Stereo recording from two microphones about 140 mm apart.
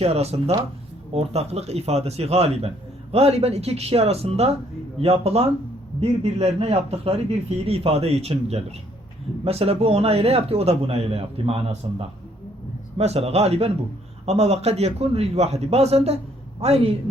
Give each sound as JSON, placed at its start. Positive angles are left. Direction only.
{"t": 0.0, "sound": "a man's voice", "side_deg": -50}